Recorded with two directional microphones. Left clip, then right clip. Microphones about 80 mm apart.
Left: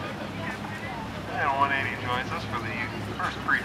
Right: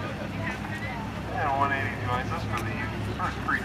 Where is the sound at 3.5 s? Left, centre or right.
Centre.